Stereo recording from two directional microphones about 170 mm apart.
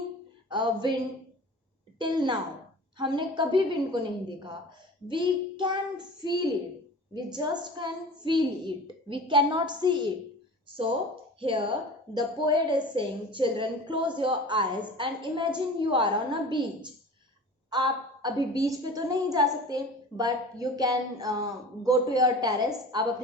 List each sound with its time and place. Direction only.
0.5 s a woman's voice: 25° right (ahead or behind)
2.0 s a woman's voice: 25° right (ahead or behind)
5.0 s a woman's voice: 30° right (ahead or behind)
11.3 s a woman's voice: 30° right (ahead or behind)